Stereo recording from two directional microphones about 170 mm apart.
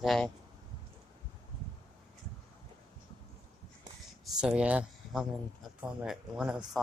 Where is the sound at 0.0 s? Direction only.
Centre (ahead or behind).